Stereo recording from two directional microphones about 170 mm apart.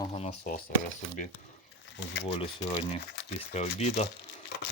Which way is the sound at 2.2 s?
35° left (ahead or behind).